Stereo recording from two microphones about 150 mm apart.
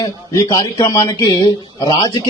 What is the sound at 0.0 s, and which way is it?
Speech, 25° left (ahead or behind).